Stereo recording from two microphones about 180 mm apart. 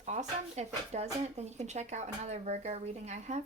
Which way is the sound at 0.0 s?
40° right (ahead or behind).